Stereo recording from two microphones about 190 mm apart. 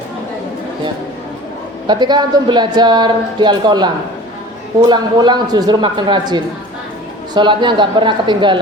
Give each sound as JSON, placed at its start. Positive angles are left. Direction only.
{"t": 1.9, "sound": "speech", "side_deg": -25}